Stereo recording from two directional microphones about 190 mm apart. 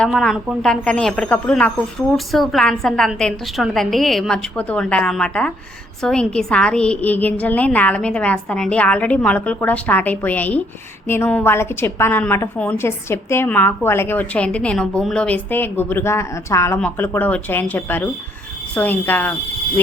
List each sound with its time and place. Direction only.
0.0 s a woman's voice: centre (ahead or behind)